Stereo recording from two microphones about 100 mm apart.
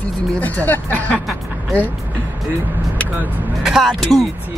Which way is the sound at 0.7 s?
15° left (ahead or behind).